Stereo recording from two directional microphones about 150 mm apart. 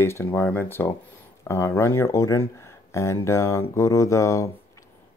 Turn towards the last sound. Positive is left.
turn(degrees=20)  # may be behind; listen again after turning